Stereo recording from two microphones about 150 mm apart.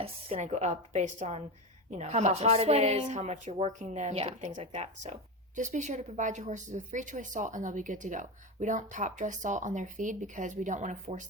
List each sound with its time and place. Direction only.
0.0 s a woman's voice: 45° right (ahead or behind)